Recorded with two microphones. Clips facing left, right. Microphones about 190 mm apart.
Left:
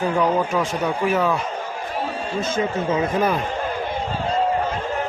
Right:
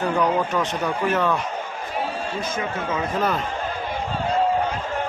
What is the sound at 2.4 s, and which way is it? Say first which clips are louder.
Speech: left 4 dB; 30° left (ahead or behind).